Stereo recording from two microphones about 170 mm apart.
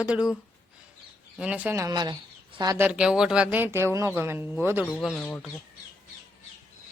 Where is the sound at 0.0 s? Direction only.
5° right (ahead or behind).